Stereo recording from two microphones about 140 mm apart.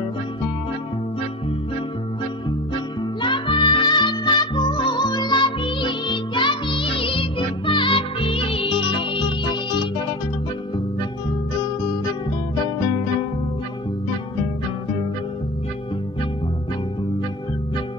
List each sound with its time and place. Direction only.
3.2 s music: 35° left (ahead or behind)